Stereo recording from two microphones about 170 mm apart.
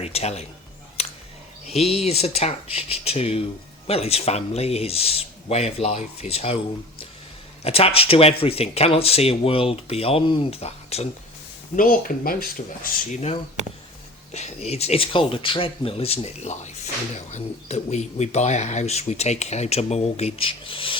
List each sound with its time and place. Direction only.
0.0 s a man's voice: 40° left (ahead or behind)
1.0 s a sound: 35° left (ahead or behind)
1.6 s speech: 35° left (ahead or behind)
7.6 s speech: 35° left (ahead or behind)
11.8 s speech: 55° left (ahead or behind)
14.3 s speech: 40° left (ahead or behind)